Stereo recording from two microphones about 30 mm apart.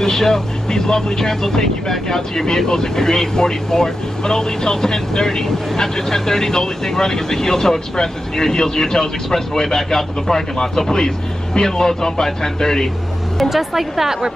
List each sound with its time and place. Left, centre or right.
0.0 s speech: centre
13.4 s speech: centre